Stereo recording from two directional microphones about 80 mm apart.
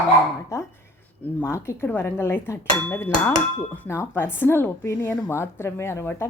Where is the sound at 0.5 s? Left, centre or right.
Left.